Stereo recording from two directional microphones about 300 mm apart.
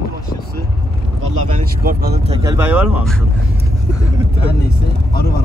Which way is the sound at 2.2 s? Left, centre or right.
Centre.